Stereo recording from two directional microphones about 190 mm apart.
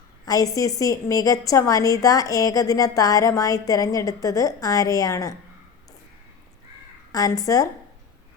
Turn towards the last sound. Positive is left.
turn(degrees=20)  # may be behind; listen again after turning